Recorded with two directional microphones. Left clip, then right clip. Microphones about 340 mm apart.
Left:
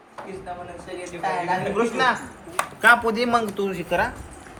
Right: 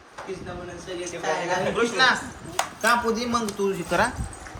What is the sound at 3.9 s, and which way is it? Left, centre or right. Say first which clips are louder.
Speech: even; centre.